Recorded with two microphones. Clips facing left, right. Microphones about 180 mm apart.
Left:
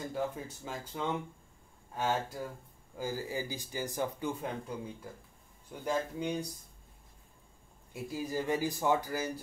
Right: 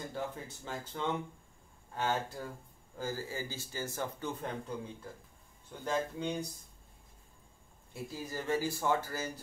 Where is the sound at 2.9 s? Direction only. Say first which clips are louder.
Left 2 dB; 15° left (ahead or behind).